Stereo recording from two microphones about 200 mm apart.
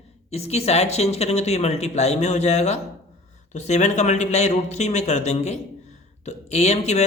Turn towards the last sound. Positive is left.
turn(degrees=35)  # may be behind; listen again after turning